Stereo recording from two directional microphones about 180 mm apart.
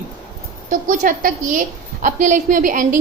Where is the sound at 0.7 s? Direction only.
45° right (ahead or behind).